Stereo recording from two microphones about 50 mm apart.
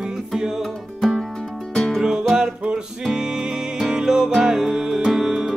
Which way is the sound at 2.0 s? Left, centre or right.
Centre.